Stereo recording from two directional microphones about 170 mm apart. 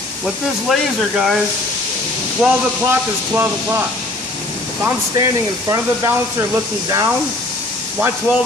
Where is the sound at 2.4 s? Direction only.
10° right (ahead or behind).